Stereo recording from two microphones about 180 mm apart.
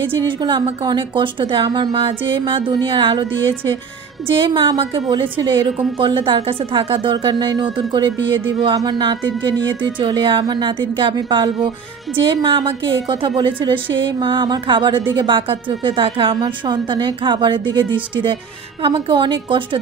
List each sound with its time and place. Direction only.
0.0 s speech: 25° right (ahead or behind)
4.3 s speech: 25° right (ahead or behind)